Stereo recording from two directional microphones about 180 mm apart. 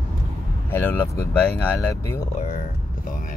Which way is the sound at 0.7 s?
10° left (ahead or behind).